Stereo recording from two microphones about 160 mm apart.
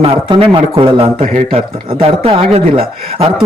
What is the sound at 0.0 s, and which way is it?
Speech, 35° right (ahead or behind).